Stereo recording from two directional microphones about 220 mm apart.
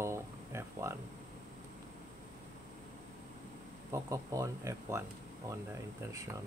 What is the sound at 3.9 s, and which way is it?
Speech, 15° right (ahead or behind).